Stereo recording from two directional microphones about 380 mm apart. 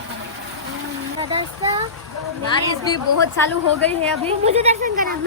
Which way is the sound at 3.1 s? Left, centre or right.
Left.